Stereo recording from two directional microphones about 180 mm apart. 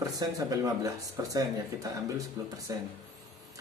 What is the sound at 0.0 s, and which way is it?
Speech, 20° right (ahead or behind).